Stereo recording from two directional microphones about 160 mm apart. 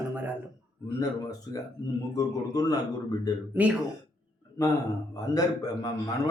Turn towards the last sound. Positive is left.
turn(degrees=25)  # may be behind; listen again after turning